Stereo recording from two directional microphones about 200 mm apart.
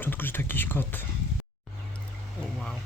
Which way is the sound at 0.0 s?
10° left (ahead or behind).